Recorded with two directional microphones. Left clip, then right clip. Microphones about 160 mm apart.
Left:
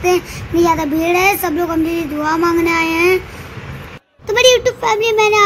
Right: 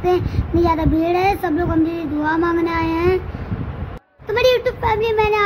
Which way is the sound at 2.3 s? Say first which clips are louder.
Left 4 dB; 20° left (ahead or behind).